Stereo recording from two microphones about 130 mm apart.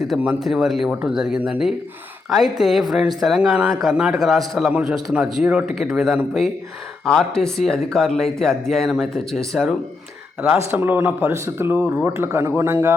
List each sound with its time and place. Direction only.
0.0 s a man's voice: 5° right (ahead or behind)
10.4 s speech: 15° right (ahead or behind)